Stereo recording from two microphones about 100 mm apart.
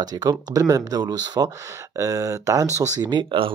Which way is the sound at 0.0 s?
40° right (ahead or behind).